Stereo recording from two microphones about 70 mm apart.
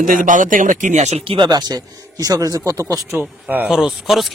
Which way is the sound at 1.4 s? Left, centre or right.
Right.